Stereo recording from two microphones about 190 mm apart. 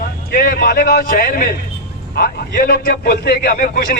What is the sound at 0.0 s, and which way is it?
A man's voice, 50° left (ahead or behind).